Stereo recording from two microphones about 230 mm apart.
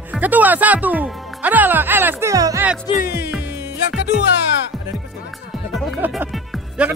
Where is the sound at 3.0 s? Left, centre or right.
Left.